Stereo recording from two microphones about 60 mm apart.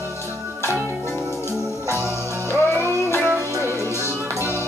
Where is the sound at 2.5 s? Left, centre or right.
Left.